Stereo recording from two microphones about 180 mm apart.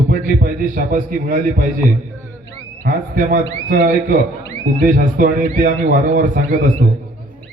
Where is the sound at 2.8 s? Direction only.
50° right (ahead or behind).